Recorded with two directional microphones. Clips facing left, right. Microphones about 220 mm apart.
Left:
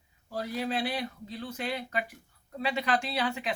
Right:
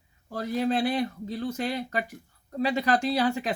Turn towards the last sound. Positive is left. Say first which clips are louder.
# right 6 dB
turn(degrees=-40)  # may be behind; listen again after turning